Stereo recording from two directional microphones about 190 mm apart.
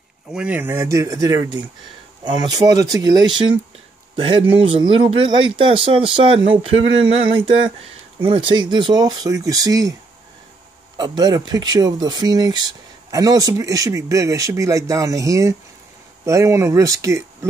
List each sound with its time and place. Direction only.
0.3 s speech: 5° right (ahead or behind)
11.0 s speech: 20° right (ahead or behind)